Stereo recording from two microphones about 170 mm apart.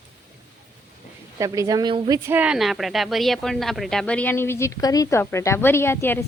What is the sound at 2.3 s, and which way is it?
A woman's voice, 10° right (ahead or behind).